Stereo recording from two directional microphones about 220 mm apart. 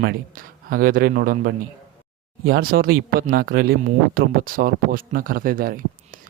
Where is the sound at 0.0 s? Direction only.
45° right (ahead or behind).